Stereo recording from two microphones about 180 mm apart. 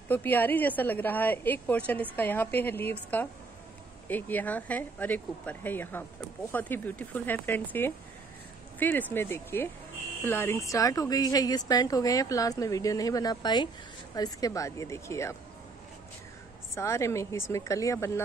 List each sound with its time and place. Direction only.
0.1 s a woman's voice: 10° left (ahead or behind)
16.7 s a woman's voice: 15° left (ahead or behind)